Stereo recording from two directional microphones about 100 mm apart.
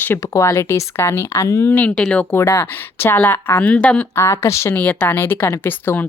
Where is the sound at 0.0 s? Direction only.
25° left (ahead or behind).